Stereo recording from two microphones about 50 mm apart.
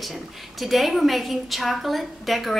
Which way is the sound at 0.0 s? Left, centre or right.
Centre.